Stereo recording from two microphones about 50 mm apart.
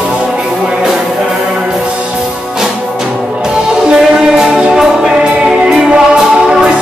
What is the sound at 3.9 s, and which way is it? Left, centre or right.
Music, centre.